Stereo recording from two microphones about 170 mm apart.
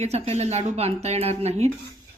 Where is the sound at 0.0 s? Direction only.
40° right (ahead or behind).